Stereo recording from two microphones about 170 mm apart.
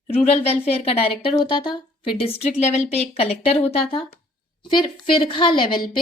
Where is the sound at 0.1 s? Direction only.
35° left (ahead or behind).